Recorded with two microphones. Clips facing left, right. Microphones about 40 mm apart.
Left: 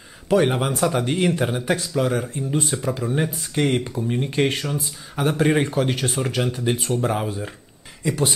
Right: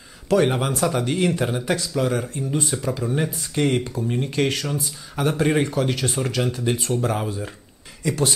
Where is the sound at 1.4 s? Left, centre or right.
Centre.